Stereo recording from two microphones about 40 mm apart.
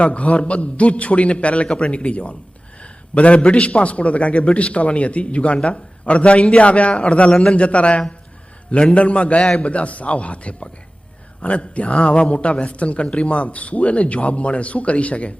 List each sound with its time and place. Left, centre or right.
0.0 s a man's voice: left